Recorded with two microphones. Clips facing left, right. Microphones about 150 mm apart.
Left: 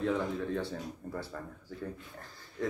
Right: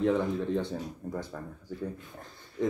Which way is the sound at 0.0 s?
20° right (ahead or behind).